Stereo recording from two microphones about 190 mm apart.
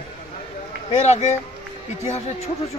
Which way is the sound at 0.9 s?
35° left (ahead or behind).